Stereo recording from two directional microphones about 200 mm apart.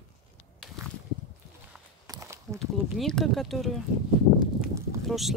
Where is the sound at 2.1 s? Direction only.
15° right (ahead or behind).